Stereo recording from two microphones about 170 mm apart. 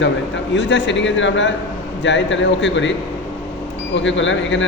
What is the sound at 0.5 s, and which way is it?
Speech, 90° left.